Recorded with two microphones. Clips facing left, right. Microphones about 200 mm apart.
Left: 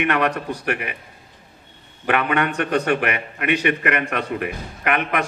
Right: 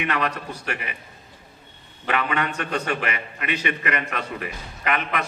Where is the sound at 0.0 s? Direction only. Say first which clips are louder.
Left 5 dB; 60° left (ahead or behind).